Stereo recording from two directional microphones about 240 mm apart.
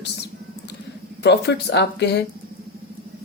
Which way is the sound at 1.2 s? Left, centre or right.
Left.